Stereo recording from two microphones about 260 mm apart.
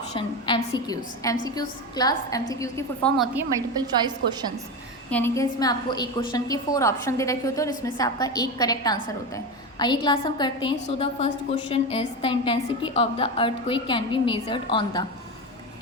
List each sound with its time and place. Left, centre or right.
0.1 s a woman's voice: centre
3.8 s a woman's voice: centre
5.1 s a woman's voice: centre